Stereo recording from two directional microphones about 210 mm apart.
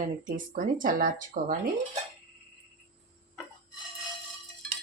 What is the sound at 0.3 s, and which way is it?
A woman's voice, 40° right (ahead or behind).